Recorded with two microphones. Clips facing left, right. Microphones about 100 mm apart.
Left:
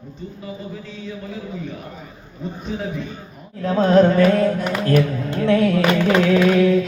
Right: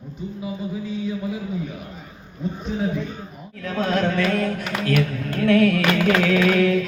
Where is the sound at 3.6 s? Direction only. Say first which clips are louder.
Left 8 dB; 35° left (ahead or behind).